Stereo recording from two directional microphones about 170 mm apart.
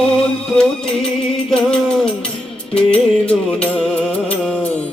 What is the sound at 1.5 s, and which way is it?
Music, 5° left (ahead or behind).